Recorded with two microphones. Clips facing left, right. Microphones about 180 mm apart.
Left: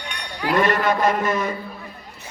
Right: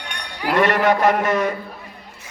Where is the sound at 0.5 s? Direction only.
70° right (ahead or behind).